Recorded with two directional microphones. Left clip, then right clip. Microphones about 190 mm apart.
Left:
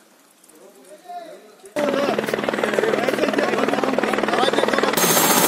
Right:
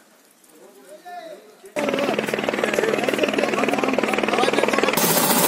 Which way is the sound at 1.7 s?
30° left (ahead or behind).